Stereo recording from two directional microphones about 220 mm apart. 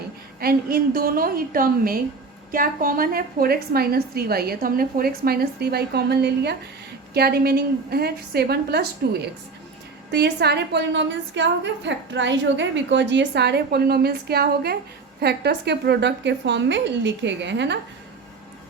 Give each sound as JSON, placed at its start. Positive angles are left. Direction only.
{"t": 0.3, "sound": "a woman's voice", "side_deg": -45}